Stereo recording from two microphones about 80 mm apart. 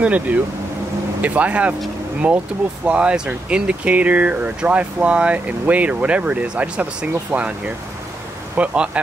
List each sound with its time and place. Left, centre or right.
0.0 s speech: centre